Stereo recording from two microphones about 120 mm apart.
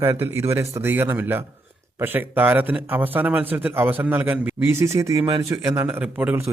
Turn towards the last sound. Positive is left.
turn(degrees=-10)  # may be behind; listen again after turning